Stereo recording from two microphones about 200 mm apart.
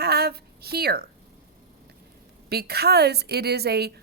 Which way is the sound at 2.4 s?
50° right (ahead or behind).